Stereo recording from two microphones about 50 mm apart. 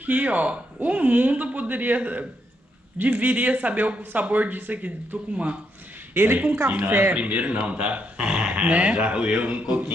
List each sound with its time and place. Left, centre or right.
0.0 s speech: right
5.3 s speech: right
6.1 s speech: right
7.2 s speech: right